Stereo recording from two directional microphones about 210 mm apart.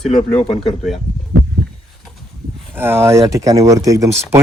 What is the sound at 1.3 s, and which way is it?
Heart sounds, 90° right.